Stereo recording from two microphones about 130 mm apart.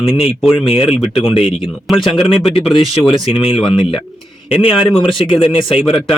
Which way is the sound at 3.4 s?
45° left (ahead or behind).